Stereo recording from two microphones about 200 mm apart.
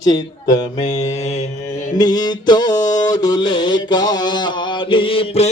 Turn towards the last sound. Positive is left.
turn(degrees=25)  # may be behind; listen again after turning